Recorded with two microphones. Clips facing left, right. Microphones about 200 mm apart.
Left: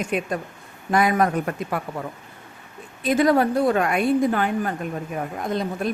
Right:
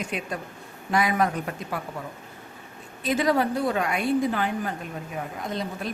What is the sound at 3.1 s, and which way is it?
A woman's voice, 50° left (ahead or behind).